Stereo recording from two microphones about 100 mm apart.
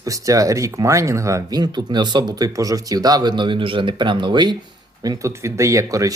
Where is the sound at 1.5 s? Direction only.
45° right (ahead or behind).